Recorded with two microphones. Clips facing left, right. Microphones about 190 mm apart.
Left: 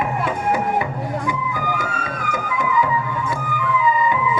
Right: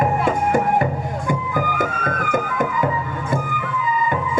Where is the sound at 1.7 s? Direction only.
50° right (ahead or behind).